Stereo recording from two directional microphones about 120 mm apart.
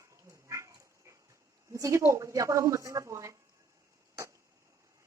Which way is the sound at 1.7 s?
25° right (ahead or behind).